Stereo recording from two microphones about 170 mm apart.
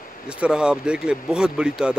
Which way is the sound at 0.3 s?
5° right (ahead or behind).